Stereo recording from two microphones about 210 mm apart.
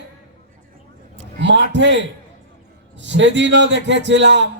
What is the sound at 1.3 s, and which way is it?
A man's voice, 60° right (ahead or behind).